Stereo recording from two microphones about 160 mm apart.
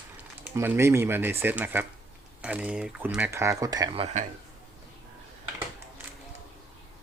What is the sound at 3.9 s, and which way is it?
Speech, 40° right (ahead or behind).